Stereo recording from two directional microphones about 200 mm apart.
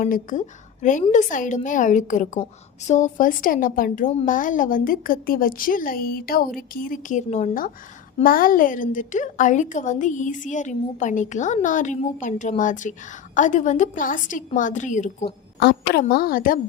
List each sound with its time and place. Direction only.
0.0 s a woman's voice: 40° left (ahead or behind)
15.5 s a woman's voice: 55° left (ahead or behind)